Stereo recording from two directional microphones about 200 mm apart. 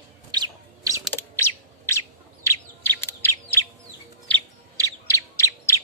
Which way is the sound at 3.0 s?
10° left (ahead or behind).